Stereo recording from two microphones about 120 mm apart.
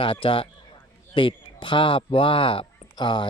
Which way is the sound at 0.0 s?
45° left (ahead or behind).